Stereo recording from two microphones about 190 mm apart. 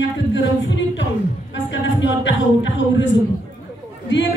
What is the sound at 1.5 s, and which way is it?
Speech, 75° left (ahead or behind).